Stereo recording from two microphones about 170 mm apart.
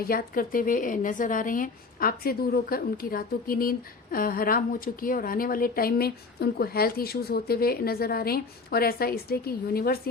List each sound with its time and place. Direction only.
0.0 s speech: 55° left (ahead or behind)